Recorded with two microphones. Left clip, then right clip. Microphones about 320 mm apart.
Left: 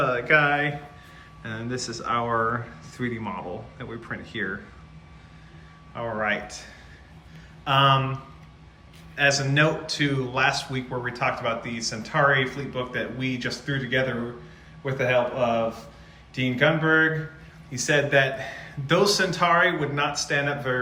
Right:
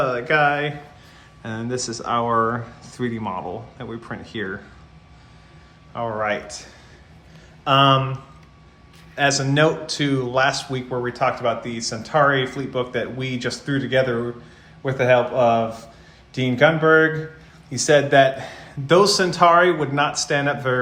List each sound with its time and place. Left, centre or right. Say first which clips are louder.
0.0 s music: right 2 dB; centre
1.4 s a man's voice: right 5 dB; centre
5.9 s a man's voice: right 3 dB; centre
9.1 s a man's voice: right 2 dB; centre